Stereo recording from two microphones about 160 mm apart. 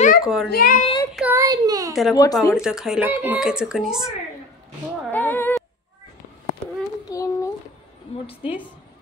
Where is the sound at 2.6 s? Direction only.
5° right (ahead or behind).